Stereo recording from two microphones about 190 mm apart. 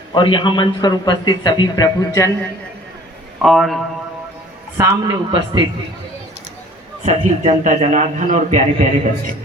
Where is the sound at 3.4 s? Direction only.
Centre (ahead or behind).